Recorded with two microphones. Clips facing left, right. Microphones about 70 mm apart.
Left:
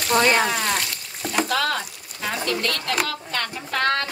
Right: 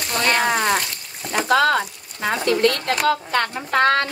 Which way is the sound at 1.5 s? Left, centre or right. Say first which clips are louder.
Right 7 dB; right.